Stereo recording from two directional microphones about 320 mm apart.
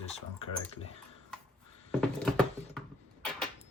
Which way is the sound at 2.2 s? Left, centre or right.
Centre.